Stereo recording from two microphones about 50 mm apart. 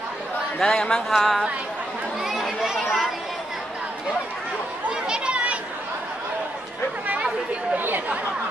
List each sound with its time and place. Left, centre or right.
0.6 s a man's voice: centre
1.0 s speech: centre
2.2 s a sound: centre
5.0 s children playing: centre
7.7 s chatter: right